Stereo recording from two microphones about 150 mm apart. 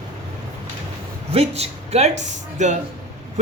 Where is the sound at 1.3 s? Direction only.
45° right (ahead or behind).